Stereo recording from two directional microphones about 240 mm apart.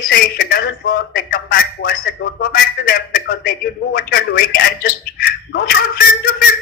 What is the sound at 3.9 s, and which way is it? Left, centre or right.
A man's voice, left.